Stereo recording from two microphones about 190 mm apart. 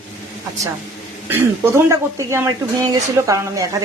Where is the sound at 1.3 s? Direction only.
15° right (ahead or behind).